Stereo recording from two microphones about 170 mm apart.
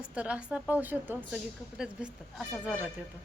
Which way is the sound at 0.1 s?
5° right (ahead or behind).